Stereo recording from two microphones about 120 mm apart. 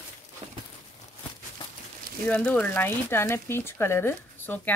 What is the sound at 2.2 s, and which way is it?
Speech, 15° left (ahead or behind).